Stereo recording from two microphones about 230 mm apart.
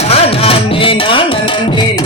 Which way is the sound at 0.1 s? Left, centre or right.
Left.